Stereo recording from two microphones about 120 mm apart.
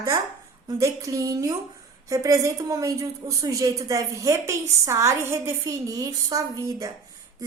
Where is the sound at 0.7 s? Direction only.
25° right (ahead or behind).